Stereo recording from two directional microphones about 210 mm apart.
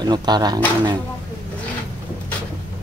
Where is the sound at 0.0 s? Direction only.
20° right (ahead or behind).